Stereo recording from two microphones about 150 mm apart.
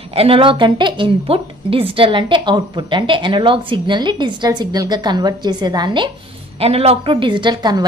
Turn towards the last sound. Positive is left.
turn(degrees=-30)  # may be behind; listen again after turning